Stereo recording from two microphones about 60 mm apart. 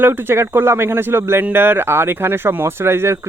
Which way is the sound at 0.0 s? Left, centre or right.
Right.